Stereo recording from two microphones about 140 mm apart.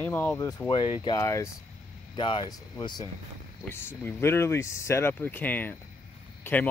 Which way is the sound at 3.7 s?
15° left (ahead or behind).